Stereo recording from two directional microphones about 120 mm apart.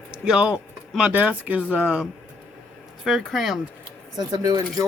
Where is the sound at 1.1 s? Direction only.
10° right (ahead or behind).